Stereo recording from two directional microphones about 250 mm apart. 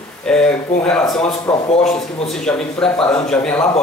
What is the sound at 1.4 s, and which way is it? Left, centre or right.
Speech, centre.